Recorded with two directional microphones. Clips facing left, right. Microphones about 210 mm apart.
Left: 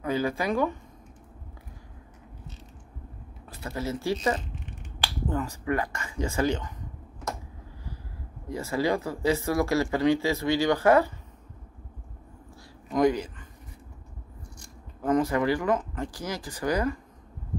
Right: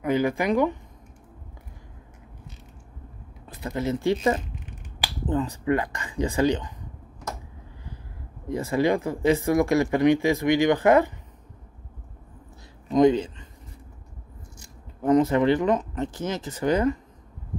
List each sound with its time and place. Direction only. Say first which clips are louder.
0.0 s speech: right 4 dB; 15° right (ahead or behind)
3.4 s speech: right 5 dB; 20° right (ahead or behind)
8.5 s speech: right 4 dB; 20° right (ahead or behind)
12.9 s speech: right 5 dB; 25° right (ahead or behind)
15.0 s speech: right 5 dB; 20° right (ahead or behind)